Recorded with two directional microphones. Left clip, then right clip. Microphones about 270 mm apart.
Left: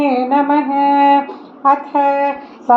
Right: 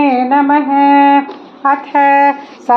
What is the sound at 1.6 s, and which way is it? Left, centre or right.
Speech, right.